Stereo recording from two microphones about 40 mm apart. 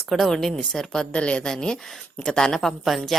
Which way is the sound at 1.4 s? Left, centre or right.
Centre.